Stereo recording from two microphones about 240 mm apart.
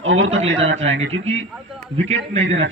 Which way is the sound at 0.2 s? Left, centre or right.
Right.